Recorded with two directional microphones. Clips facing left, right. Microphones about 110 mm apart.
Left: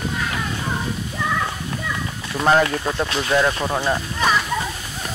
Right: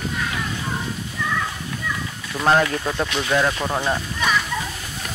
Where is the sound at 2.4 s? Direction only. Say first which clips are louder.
Left 1 dB; centre (ahead or behind).